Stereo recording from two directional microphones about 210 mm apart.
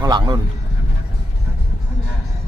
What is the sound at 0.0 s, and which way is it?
Speech, 20° right (ahead or behind).